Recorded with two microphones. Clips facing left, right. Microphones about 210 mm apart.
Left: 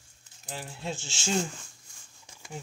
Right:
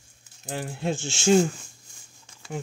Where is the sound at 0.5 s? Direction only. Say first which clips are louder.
Right 8 dB; 55° right (ahead or behind).